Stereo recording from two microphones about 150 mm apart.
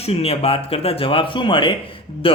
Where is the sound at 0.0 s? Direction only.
40° left (ahead or behind).